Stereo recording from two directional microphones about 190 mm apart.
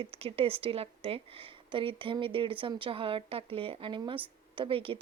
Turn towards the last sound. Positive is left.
turn(degrees=-30)  # may be behind; listen again after turning